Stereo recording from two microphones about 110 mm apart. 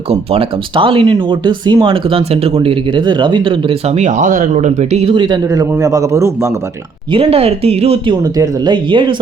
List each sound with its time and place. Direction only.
0.1 s speech: 60° right (ahead or behind)
3.8 s speech: 90° right
5.1 s speech: 45° right (ahead or behind)
5.5 s a man's voice: 30° right (ahead or behind)
7.1 s speech: 60° right (ahead or behind)
8.1 s speech: 40° right (ahead or behind)